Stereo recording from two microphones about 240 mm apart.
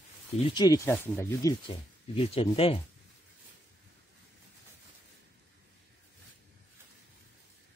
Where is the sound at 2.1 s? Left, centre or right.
Left.